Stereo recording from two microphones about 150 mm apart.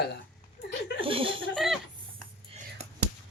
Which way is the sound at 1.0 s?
35° right (ahead or behind).